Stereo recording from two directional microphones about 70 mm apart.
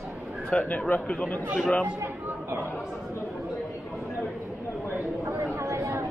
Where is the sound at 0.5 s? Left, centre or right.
Centre.